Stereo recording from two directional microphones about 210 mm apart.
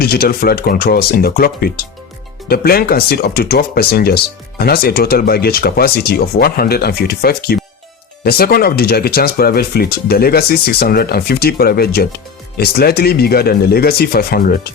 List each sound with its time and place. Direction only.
0.0 s speech: 45° left (ahead or behind)